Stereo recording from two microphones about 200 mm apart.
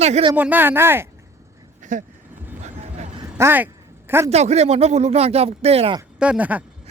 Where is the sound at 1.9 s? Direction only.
40° right (ahead or behind).